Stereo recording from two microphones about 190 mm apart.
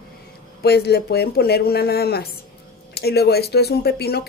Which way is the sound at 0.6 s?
55° left (ahead or behind).